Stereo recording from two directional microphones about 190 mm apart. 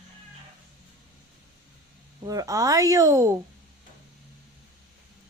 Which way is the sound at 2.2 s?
20° right (ahead or behind).